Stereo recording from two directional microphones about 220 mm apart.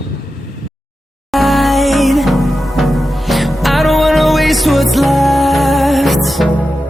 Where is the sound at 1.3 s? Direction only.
Centre (ahead or behind).